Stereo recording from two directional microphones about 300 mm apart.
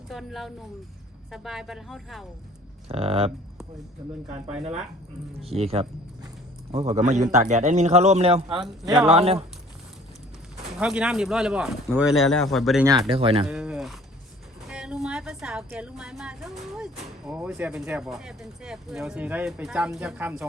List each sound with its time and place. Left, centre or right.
0.1 s a woman's voice: centre
2.9 s a man's voice: centre
4.6 s a man's voice: right
10.8 s a woman's voice: centre
13.1 s speech: centre
13.5 s a sound: centre
14.7 s a woman's voice: centre